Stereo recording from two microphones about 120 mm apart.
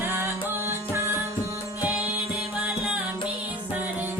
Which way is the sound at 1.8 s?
15° right (ahead or behind).